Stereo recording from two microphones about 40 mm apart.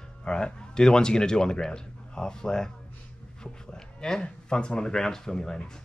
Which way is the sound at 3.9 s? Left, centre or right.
Centre.